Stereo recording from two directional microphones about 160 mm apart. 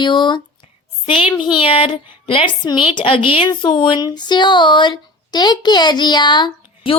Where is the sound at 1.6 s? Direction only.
35° left (ahead or behind).